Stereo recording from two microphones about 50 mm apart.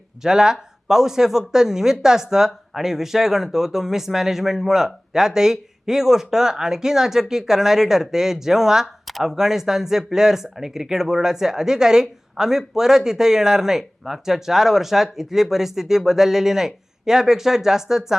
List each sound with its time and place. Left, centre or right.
0.2 s speech: centre